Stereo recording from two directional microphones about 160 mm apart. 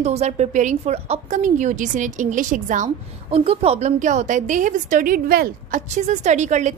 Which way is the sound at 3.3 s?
35° right (ahead or behind).